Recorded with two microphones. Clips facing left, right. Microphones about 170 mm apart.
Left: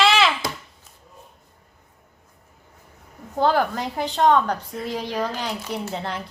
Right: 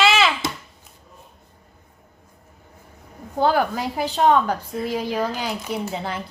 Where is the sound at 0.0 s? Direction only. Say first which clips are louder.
Even; centre (ahead or behind).